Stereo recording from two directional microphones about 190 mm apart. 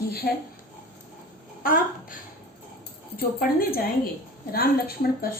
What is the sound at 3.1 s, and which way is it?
A woman's voice, 50° left (ahead or behind).